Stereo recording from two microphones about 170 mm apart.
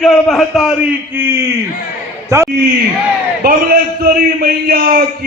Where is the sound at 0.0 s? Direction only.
Centre (ahead or behind); by 2.5 s 20° right (ahead or behind).